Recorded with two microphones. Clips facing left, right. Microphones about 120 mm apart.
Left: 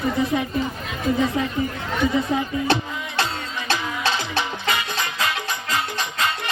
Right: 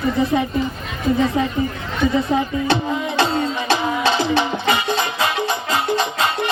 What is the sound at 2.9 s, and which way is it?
Music, 25° right (ahead or behind).